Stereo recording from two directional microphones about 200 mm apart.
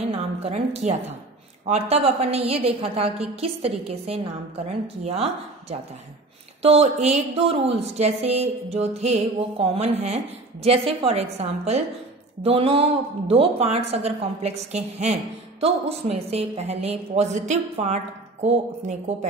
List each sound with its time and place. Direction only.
0.1 s a woman's voice: 30° right (ahead or behind)